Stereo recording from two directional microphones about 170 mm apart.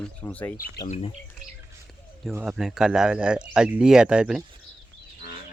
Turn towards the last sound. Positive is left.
turn(degrees=-5)  # may be behind; listen again after turning